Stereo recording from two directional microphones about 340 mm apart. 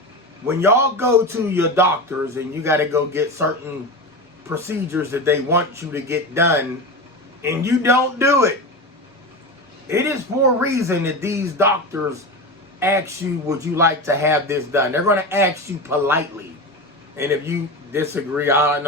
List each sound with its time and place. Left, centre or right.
0.4 s a man's voice: centre
9.9 s a man's voice: centre